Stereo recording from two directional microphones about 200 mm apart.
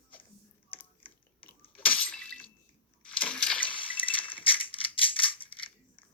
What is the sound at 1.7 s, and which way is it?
Breaking, 5° left (ahead or behind).